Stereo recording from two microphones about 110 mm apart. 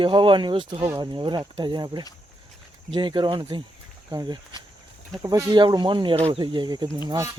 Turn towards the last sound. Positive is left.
turn(degrees=-30)  # may be behind; listen again after turning